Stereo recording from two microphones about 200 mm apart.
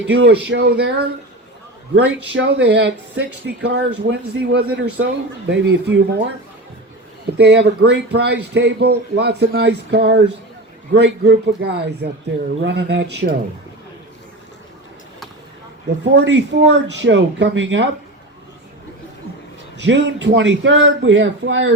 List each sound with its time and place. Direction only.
0.1 s speech: 55° right (ahead or behind)
7.3 s speech: 55° right (ahead or behind)
16.0 s speech: 65° right (ahead or behind)
19.7 s speech: 60° right (ahead or behind)